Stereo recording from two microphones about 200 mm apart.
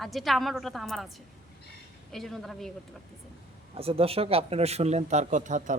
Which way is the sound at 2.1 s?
Centre (ahead or behind).